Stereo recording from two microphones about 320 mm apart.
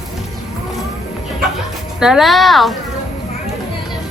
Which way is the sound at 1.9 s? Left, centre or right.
Centre.